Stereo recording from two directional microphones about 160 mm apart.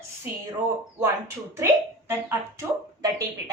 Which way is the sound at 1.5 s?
15° right (ahead or behind).